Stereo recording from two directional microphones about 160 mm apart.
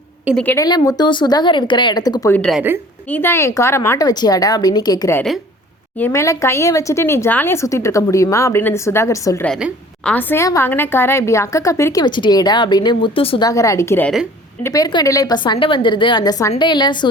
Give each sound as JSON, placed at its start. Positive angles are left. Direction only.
{"t": 0.5, "sound": "a woman's voice", "side_deg": 20}
{"t": 2.3, "sound": "a woman's voice", "side_deg": 5}
{"t": 10.0, "sound": "a woman's voice", "side_deg": 10}
{"t": 13.5, "sound": "a woman's voice", "side_deg": 20}